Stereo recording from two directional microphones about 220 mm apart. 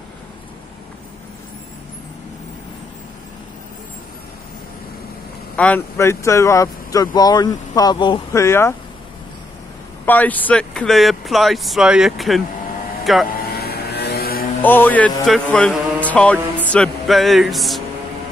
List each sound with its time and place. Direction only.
5.6 s speech: 10° left (ahead or behind)
10.0 s speech: 5° left (ahead or behind)
13.4 s vehicle: 45° left (ahead or behind)
14.6 s music: 10° left (ahead or behind)